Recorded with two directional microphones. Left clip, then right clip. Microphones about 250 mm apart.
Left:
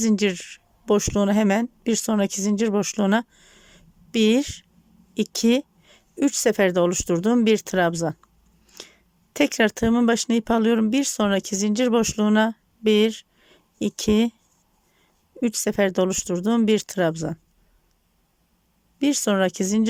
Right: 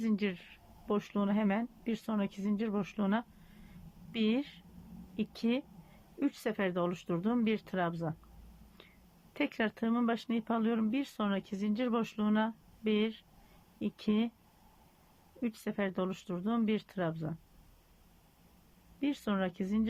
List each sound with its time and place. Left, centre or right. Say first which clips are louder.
0.0 s speech: left 13 dB; left
3.7 s a sound: left 16 dB; left
5.1 s speech: left 14 dB; left
9.3 s speech: left 14 dB; left
15.4 s speech: left 15 dB; left
18.9 s speech: left 14 dB; left